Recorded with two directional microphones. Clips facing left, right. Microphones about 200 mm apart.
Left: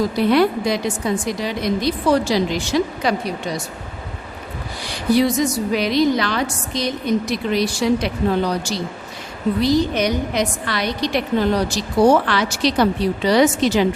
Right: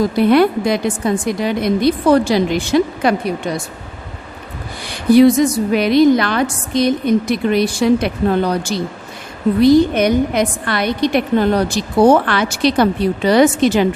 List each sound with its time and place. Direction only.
0.2 s a woman's voice: 55° right (ahead or behind)
4.9 s a woman's voice: 55° right (ahead or behind)